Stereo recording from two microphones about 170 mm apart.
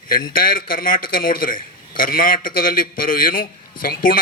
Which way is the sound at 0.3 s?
55° left (ahead or behind).